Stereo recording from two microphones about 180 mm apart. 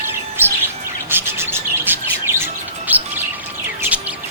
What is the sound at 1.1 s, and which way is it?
Bird, 10° right (ahead or behind).